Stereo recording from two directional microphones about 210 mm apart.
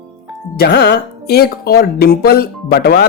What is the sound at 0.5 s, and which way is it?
A man's voice, 45° left (ahead or behind).